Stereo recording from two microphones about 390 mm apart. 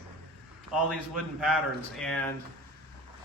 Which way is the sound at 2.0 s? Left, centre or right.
Centre.